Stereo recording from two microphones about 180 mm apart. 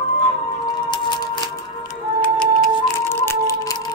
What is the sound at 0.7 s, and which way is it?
Music, 25° left (ahead or behind).